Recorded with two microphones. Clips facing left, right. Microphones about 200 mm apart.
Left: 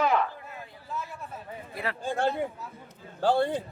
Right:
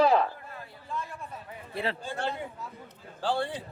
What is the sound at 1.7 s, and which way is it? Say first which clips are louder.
Speech: right 3 dB; 30° right (ahead or behind).